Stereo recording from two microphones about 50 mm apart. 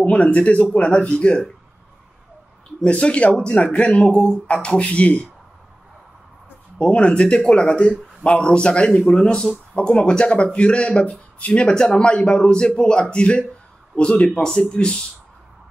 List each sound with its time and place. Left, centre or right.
0.0 s speech: left
2.9 s speech: left
6.8 s speech: left